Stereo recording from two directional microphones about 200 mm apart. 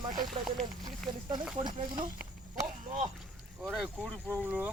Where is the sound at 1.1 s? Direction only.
20° right (ahead or behind).